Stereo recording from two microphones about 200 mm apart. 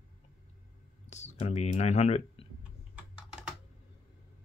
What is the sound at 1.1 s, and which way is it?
Speech, 35° left (ahead or behind).